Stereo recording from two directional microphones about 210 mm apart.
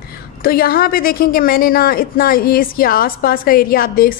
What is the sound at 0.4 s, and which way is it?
A woman's voice, 45° left (ahead or behind).